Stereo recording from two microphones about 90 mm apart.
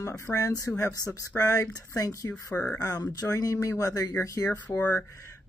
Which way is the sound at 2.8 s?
40° left (ahead or behind).